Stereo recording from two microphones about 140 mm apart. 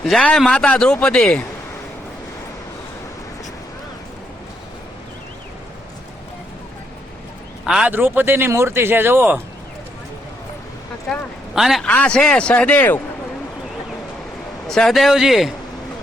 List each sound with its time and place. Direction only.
0.0 s a man's voice: 5° left (ahead or behind)
7.6 s speech: 5° right (ahead or behind)
11.1 s a man's voice: centre (ahead or behind)
14.7 s a man's voice: centre (ahead or behind)